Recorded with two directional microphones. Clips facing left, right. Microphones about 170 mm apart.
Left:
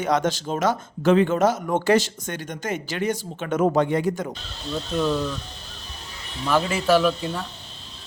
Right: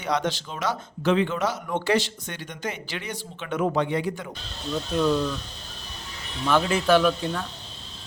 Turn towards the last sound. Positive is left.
turn(degrees=5)  # may be behind; listen again after turning